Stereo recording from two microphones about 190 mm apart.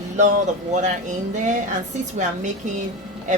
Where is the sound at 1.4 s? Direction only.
40° right (ahead or behind).